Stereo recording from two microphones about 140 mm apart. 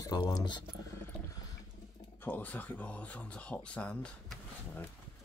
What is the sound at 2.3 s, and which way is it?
Speech, 10° left (ahead or behind).